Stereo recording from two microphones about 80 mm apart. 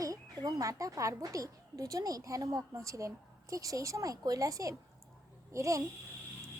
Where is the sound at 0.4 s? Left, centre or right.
Right.